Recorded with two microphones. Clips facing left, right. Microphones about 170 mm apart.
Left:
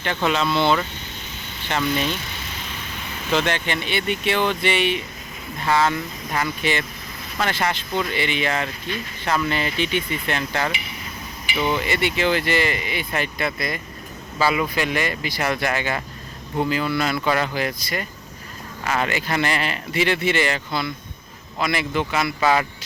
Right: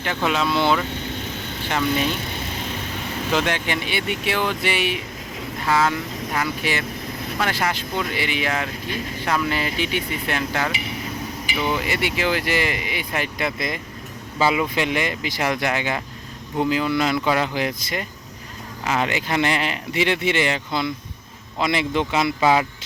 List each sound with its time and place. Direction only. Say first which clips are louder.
0.0 s speech: even; 5° right (ahead or behind)
3.3 s speech: left 1 dB; 10° right (ahead or behind)
11.7 s speech: left 1 dB; 10° right (ahead or behind)